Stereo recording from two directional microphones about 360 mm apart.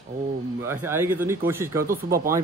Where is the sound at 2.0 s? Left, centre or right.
Right.